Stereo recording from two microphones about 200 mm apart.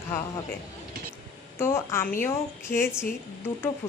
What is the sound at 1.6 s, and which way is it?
A woman's voice, 10° left (ahead or behind).